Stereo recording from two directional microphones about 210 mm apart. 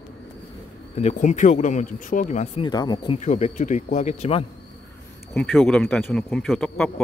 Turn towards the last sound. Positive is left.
turn(degrees=0)  # may be behind; listen again after turning